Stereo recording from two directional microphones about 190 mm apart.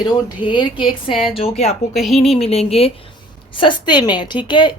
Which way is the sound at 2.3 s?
30° left (ahead or behind).